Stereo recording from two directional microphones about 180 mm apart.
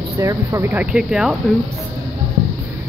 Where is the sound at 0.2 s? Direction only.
20° right (ahead or behind).